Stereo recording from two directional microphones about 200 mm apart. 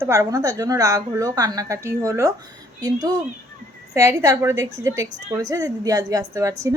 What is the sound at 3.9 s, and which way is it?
A woman's voice, 15° right (ahead or behind).